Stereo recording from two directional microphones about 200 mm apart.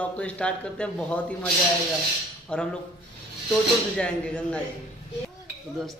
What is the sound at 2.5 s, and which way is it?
Speech, 5° left (ahead or behind).